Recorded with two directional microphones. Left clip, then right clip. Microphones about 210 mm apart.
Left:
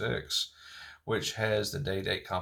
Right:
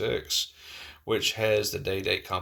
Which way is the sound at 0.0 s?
10° right (ahead or behind).